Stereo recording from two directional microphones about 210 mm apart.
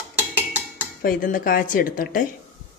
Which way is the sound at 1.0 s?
40° left (ahead or behind).